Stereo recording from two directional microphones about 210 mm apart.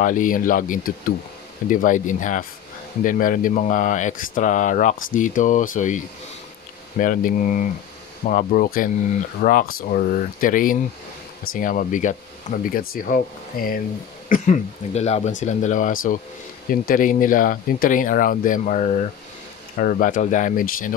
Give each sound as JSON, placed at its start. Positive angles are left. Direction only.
{"t": 0.0, "sound": "speech", "side_deg": 40}